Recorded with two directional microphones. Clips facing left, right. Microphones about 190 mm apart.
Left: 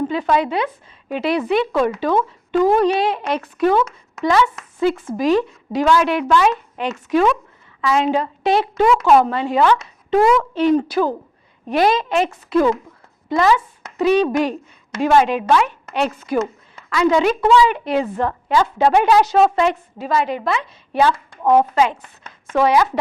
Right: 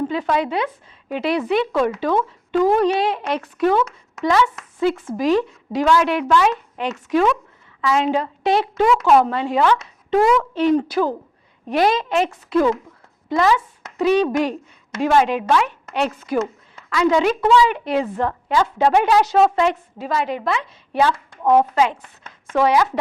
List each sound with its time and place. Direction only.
0.1 s speech: 10° left (ahead or behind)
4.9 s speech: 20° left (ahead or behind)
5.2 s speech: 10° left (ahead or behind)